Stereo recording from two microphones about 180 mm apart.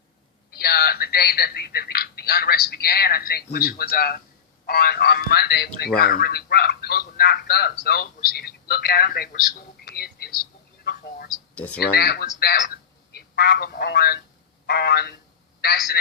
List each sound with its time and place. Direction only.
0.5 s a man's voice: 60° left (ahead or behind)
11.5 s speech: 10° left (ahead or behind)
11.8 s a man's voice: 60° left (ahead or behind)